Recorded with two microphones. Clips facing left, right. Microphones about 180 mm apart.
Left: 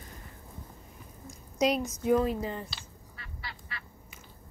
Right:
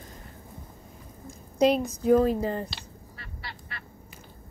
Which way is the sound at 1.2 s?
55° right (ahead or behind).